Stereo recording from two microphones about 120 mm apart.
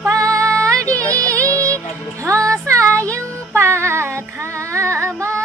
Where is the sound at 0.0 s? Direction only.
30° right (ahead or behind).